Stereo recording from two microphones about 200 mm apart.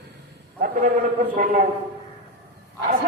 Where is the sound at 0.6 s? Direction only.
40° right (ahead or behind).